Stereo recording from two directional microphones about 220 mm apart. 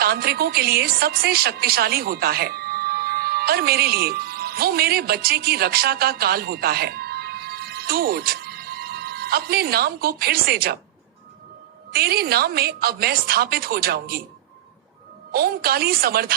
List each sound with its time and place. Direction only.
0.0 s a woman's voice: 45° right (ahead or behind)
11.9 s speech: 45° right (ahead or behind)
15.3 s speech: 45° right (ahead or behind)